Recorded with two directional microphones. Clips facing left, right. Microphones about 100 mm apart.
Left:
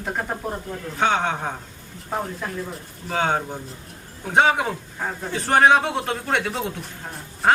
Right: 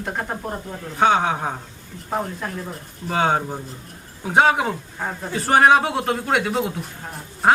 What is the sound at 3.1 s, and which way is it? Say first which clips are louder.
A man's voice: right 2 dB; 5° right (ahead or behind).